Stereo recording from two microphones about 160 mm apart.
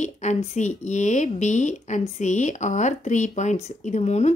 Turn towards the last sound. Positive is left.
turn(degrees=45)  # may be behind; listen again after turning